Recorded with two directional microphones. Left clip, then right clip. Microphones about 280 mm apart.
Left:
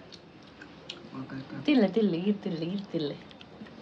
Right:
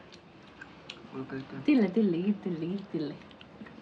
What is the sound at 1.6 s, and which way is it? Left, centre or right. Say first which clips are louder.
Speech: left 1 dB; left.